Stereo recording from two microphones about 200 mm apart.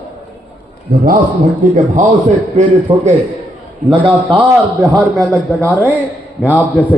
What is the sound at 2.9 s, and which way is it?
A man's voice, 20° right (ahead or behind).